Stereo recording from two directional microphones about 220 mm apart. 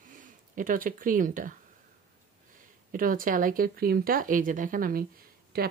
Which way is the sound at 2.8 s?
40° right (ahead or behind).